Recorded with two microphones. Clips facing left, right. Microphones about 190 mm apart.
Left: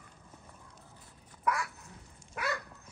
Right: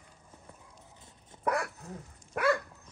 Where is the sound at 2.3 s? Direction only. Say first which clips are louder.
Right 9 dB; 55° right (ahead or behind).